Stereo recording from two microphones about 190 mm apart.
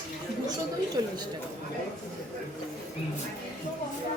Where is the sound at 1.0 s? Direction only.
20° right (ahead or behind).